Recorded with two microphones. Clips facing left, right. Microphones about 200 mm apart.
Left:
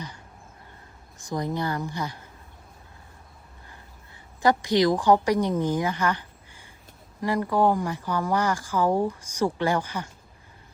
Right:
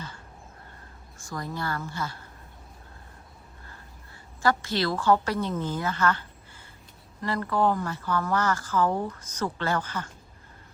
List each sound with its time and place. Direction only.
1.2 s speech: 20° left (ahead or behind)
3.7 s a sound: 15° left (ahead or behind)
7.2 s speech: 15° left (ahead or behind)